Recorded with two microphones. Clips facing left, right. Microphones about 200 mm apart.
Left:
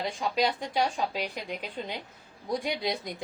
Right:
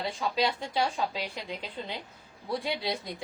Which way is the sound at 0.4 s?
15° left (ahead or behind).